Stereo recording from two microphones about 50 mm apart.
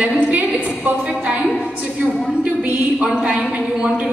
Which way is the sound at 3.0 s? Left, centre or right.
Centre.